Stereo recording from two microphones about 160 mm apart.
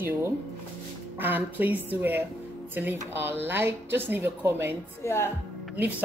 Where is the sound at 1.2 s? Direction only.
10° right (ahead or behind).